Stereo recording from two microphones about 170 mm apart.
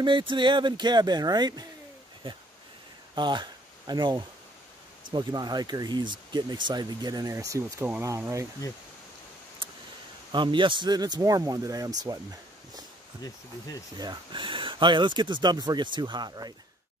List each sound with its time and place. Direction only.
0.0 s speech: 30° right (ahead or behind)
10.3 s speech: 30° right (ahead or behind)
13.2 s speech: 20° left (ahead or behind)
13.9 s speech: 25° right (ahead or behind)